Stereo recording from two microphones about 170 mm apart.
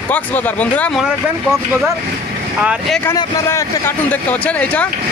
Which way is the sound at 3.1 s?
15° left (ahead or behind).